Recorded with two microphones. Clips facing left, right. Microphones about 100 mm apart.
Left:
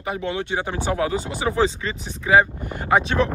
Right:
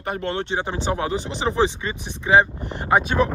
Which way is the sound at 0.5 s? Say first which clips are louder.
Even; 25° right (ahead or behind).